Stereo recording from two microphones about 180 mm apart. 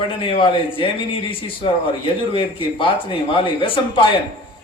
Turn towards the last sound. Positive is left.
turn(degrees=30)  # may be behind; listen again after turning